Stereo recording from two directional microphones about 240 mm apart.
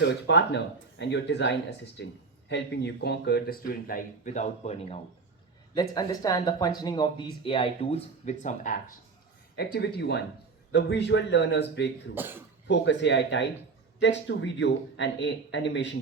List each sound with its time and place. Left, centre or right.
0.0 s speech: left
5.9 s speech: centre; by 8.8 s left
9.7 s speech: left
12.1 s speech: centre
12.6 s speech: left